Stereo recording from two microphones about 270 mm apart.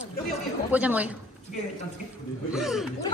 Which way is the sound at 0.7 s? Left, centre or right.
Centre.